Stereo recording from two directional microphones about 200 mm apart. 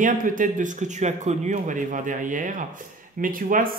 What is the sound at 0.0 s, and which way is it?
A man's voice, 40° right (ahead or behind).